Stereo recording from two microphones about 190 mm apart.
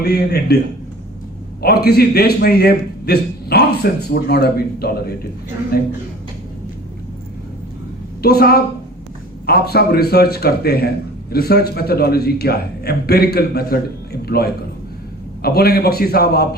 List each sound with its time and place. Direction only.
0.0 s a man's voice: 60° left (ahead or behind)
1.6 s a man's voice: 55° left (ahead or behind)
8.2 s a man's voice: 55° left (ahead or behind)